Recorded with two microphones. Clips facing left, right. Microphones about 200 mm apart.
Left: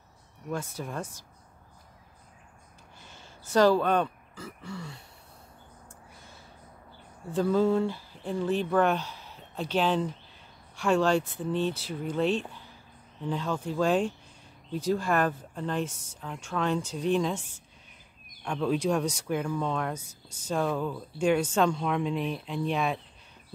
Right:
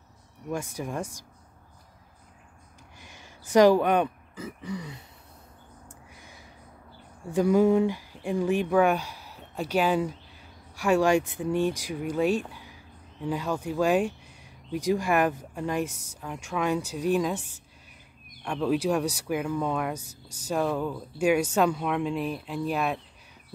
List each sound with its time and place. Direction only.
0.5 s speech: 15° right (ahead or behind)
3.0 s speech: 15° right (ahead or behind)
5.9 s a sound: 15° right (ahead or behind)
7.3 s speech: 15° right (ahead or behind)
18.4 s speech: 5° right (ahead or behind)